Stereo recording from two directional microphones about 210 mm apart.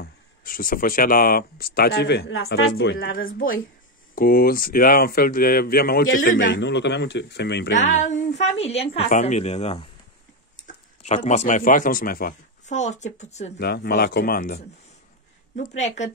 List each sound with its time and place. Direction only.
0.0 s speech: 40° left (ahead or behind)
6.5 s speech: 55° left (ahead or behind)
7.7 s a woman's voice: 35° left (ahead or behind)
13.6 s a woman's voice: 50° left (ahead or behind); by 16.1 s 35° left (ahead or behind)